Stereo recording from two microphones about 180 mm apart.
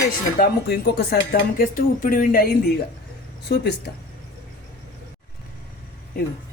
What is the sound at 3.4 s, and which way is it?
Speech, 65° left (ahead or behind).